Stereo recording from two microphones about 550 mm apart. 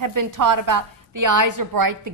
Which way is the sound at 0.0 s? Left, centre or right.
Right.